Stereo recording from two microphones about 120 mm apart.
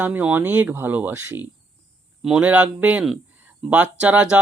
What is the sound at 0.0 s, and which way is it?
Speech, 15° right (ahead or behind).